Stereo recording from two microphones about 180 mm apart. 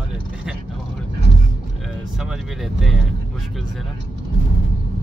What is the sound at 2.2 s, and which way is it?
Speech, centre (ahead or behind).